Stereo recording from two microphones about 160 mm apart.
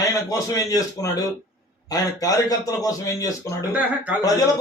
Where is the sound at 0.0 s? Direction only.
20° left (ahead or behind).